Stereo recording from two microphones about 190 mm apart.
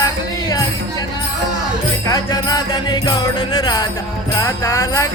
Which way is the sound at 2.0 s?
20° left (ahead or behind).